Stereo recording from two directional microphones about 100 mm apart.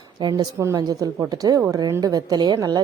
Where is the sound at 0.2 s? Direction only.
45° right (ahead or behind).